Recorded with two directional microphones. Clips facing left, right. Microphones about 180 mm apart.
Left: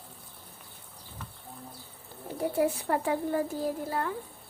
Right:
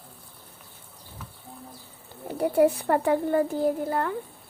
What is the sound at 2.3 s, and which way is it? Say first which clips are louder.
Speech: right 7 dB; 60° right (ahead or behind).